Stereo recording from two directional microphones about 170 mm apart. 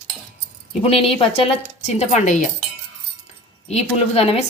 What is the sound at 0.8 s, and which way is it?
Speech, 35° left (ahead or behind).